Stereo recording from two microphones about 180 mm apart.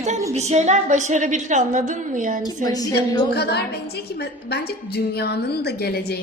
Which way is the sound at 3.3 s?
65° left (ahead or behind).